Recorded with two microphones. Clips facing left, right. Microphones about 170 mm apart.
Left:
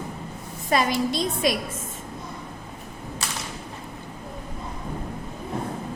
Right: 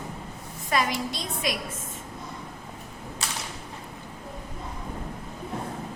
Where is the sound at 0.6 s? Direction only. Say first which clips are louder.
Left 4 dB; 30° left (ahead or behind).